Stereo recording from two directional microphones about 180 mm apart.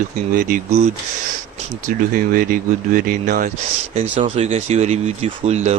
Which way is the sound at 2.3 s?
50° right (ahead or behind).